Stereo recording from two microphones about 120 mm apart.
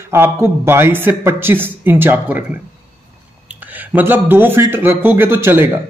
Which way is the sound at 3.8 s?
15° right (ahead or behind).